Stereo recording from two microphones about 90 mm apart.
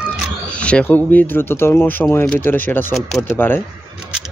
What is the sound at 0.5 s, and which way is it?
Speech, 15° left (ahead or behind).